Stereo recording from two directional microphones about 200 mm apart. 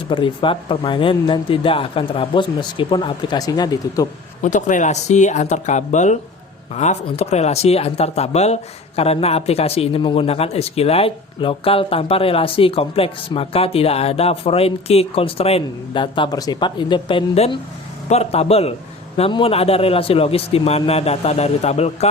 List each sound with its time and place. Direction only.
0.1 s speech: 25° left (ahead or behind)
4.4 s speech: 40° left (ahead or behind)